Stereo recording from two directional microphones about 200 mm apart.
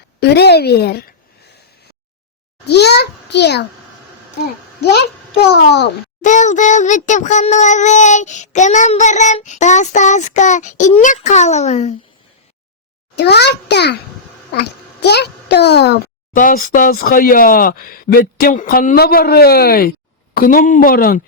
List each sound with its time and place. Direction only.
0.2 s a child's voice: 55° left (ahead or behind)
2.6 s a child's voice: 55° left (ahead or behind)
4.8 s a child's voice: 55° left (ahead or behind)
6.2 s child singing: 40° left (ahead or behind)
13.1 s a child's voice: 55° left (ahead or behind)